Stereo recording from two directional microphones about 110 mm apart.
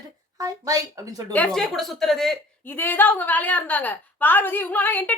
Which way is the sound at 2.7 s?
20° left (ahead or behind).